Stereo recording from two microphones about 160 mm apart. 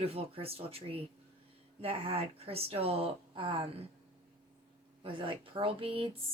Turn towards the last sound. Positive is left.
turn(degrees=-35)  # may be behind; listen again after turning